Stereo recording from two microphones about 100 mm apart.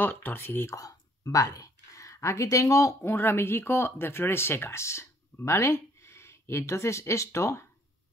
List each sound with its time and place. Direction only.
0.0 s speech: 20° left (ahead or behind)
0.7 s speech: 35° left (ahead or behind)